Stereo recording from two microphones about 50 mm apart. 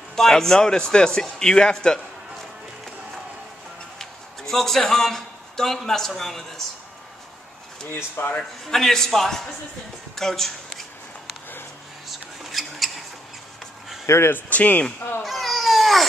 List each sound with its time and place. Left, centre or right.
0.1 s a man's voice: centre
4.0 s a man's voice: centre
7.9 s speech: left
8.6 s a man's voice: centre
12.1 s a sound: centre
14.0 s speech: left
14.5 s speech: left
15.2 s cat: centre